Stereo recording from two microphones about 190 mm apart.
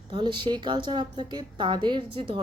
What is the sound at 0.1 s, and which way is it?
A woman's voice, 25° right (ahead or behind).